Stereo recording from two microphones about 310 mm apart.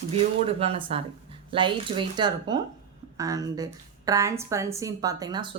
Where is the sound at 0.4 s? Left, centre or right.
Centre.